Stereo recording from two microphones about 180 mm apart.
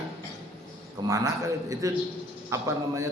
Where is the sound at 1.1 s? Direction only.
15° right (ahead or behind).